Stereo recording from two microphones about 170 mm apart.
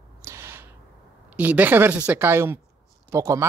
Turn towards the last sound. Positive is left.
turn(degrees=-15)  # may be behind; listen again after turning